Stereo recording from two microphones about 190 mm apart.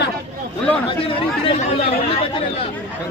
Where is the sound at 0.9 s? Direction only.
30° left (ahead or behind).